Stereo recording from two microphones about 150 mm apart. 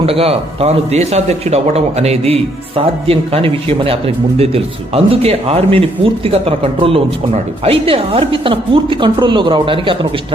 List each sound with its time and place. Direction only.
0.0 s a man's voice: 40° right (ahead or behind)